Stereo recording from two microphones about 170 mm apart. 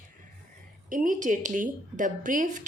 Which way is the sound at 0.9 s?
50° right (ahead or behind).